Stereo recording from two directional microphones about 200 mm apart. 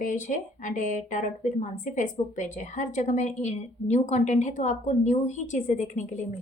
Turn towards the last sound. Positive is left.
turn(degrees=35)  # may be behind; listen again after turning